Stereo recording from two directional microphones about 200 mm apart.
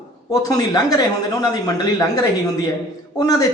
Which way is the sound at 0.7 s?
20° left (ahead or behind).